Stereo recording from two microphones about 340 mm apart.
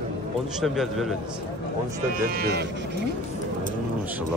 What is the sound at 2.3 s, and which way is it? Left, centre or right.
Speech, right.